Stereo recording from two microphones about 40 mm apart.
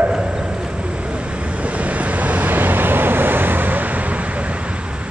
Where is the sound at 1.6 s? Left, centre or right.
Right.